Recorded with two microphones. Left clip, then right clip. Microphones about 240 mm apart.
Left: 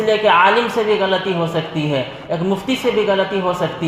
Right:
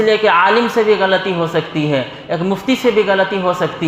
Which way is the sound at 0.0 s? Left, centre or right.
Right.